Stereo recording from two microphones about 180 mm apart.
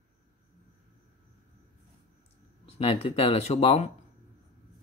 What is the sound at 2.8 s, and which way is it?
Speech, 30° left (ahead or behind).